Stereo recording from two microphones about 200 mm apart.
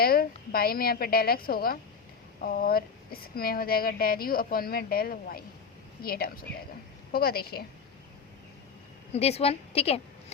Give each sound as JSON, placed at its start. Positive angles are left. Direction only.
{"t": 0.0, "sound": "speech", "side_deg": 50}
{"t": 9.1, "sound": "a woman's voice", "side_deg": 30}